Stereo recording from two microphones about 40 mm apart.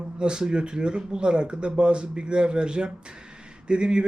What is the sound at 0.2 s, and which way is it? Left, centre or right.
A man's voice, right.